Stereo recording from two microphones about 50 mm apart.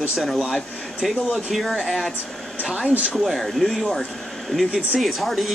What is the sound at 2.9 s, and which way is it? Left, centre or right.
Speech, right.